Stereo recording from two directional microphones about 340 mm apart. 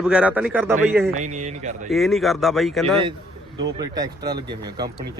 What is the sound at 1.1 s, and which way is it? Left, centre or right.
Speech, right.